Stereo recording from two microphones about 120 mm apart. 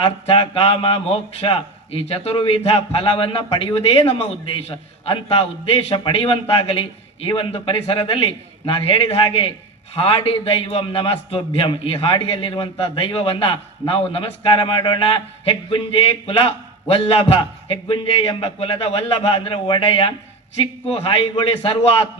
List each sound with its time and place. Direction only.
0.3 s a man's voice: 55° left (ahead or behind)